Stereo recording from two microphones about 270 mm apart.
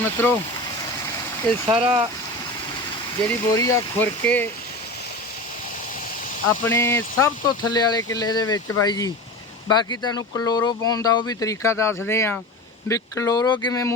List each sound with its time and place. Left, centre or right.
0.0 s speech: centre
1.6 s speech: centre
3.2 s speech: centre
6.7 s speech: centre